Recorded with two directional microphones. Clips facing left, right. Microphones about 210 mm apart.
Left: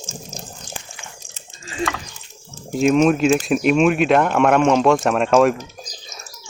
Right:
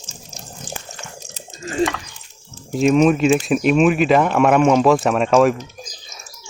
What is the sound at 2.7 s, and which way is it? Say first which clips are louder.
Speech: right 1 dB; centre (ahead or behind).